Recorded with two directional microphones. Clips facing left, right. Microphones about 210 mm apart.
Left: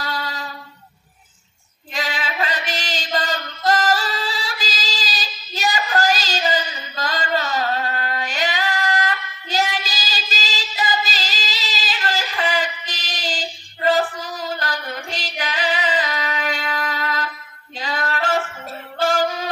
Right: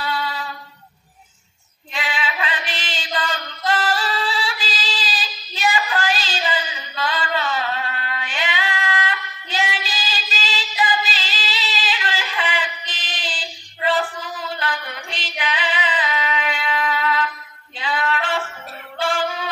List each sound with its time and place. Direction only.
0.0 s music: 40° left (ahead or behind)
2.0 s music: 40° left (ahead or behind)
17.7 s female singing: 40° left (ahead or behind)
18.9 s music: 40° left (ahead or behind)